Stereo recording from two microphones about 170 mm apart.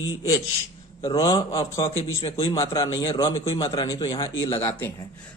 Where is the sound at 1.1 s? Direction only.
25° left (ahead or behind).